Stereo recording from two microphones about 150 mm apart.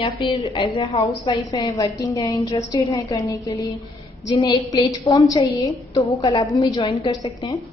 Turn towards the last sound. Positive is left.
turn(degrees=25)  # may be behind; listen again after turning